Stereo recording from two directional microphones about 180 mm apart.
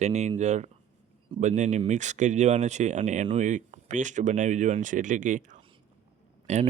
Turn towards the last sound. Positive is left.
turn(degrees=-40)  # may be behind; listen again after turning